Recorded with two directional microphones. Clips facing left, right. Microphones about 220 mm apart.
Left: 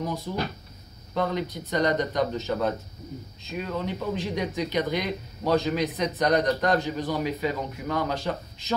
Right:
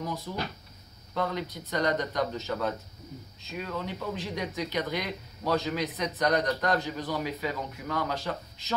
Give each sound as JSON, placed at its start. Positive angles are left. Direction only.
{"t": 0.3, "sound": "speech", "side_deg": 20}